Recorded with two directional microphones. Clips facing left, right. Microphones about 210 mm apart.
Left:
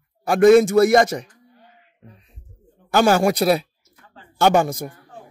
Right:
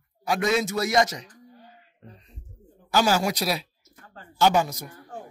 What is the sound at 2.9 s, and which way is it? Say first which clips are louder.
Speech: left 6 dB; 55° left (ahead or behind).